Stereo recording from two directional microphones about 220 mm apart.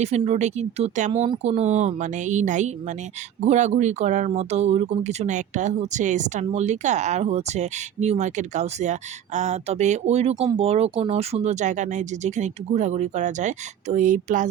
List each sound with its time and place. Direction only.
0.0 s speech: 30° right (ahead or behind)